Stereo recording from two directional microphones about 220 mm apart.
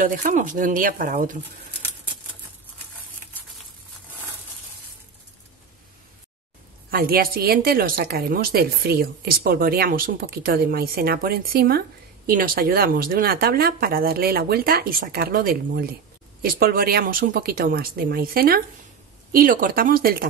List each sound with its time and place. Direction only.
0.0 s speech: 35° right (ahead or behind)
6.9 s a woman's voice: 40° right (ahead or behind)